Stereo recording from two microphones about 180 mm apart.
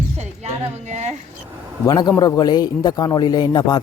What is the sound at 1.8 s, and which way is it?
A man's voice, 20° left (ahead or behind).